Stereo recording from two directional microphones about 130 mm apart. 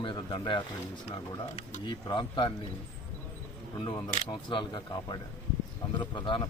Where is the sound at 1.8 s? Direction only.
40° left (ahead or behind).